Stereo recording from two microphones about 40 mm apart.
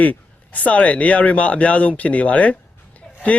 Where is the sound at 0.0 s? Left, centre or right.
Left.